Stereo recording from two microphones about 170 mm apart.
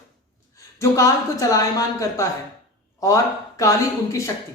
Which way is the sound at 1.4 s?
20° left (ahead or behind).